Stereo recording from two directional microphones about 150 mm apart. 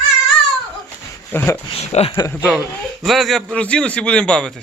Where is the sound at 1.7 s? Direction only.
40° left (ahead or behind).